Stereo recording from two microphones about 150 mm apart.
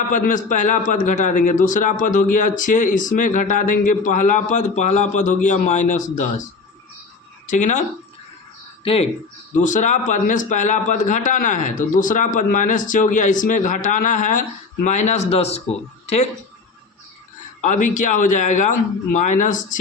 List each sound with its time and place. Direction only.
0.1 s a man's voice: 60° left (ahead or behind)
7.4 s speech: 55° left (ahead or behind)
8.8 s speech: 40° left (ahead or behind)
9.6 s a man's voice: 55° left (ahead or behind)
17.6 s a man's voice: 55° left (ahead or behind)